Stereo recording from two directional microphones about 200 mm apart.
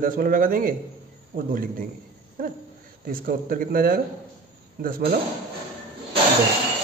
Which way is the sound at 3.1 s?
45° right (ahead or behind).